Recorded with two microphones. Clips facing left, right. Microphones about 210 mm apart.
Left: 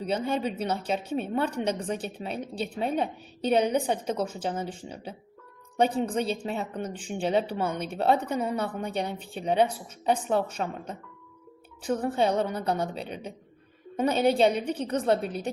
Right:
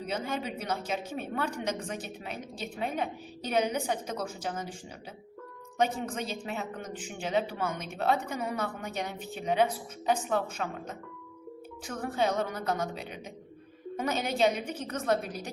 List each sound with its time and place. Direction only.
0.0 s a woman's voice: 30° left (ahead or behind)
11.9 s a woman's voice: 30° left (ahead or behind)